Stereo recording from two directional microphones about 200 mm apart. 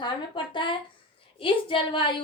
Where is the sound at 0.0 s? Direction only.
25° left (ahead or behind).